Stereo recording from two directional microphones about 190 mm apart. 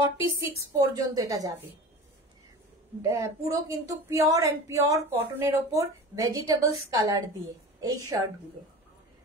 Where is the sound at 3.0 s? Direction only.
15° right (ahead or behind).